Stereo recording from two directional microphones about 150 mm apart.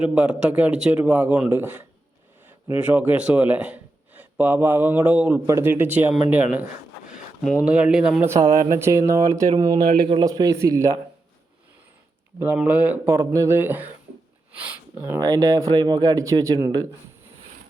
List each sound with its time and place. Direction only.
0.0 s a man's voice: 5° right (ahead or behind)
8.4 s speech: 25° right (ahead or behind)
12.5 s a man's voice: 10° right (ahead or behind)
13.1 s a man's voice: 20° right (ahead or behind)
15.2 s speech: 25° right (ahead or behind)